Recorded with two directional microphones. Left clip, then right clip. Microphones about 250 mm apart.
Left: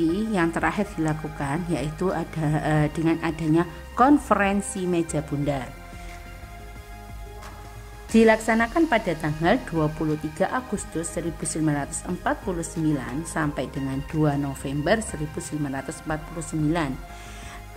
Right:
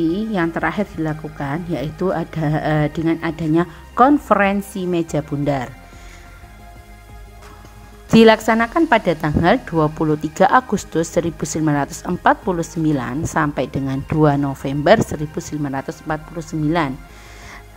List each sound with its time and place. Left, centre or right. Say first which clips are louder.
0.0 s speech: right 4 dB; centre
8.1 s a woman's voice: right 7 dB; centre